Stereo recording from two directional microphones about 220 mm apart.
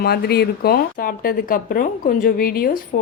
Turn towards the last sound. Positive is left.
turn(degrees=40)  # may be behind; listen again after turning